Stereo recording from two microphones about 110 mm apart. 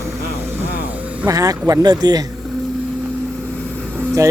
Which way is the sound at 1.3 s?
30° right (ahead or behind).